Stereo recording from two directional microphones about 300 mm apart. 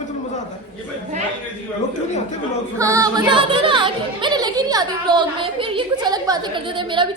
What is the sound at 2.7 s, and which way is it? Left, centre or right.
Speech, centre.